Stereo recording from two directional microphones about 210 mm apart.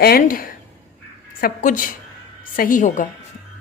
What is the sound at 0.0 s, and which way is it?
A woman's voice, 45° left (ahead or behind).